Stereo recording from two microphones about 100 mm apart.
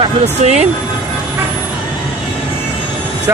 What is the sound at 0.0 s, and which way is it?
Speech, 90° right.